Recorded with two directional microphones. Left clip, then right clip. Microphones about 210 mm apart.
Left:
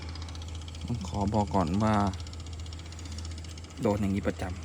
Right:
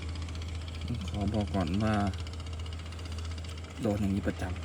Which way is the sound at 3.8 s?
35° left (ahead or behind).